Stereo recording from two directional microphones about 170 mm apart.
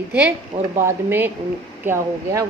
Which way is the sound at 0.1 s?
10° right (ahead or behind).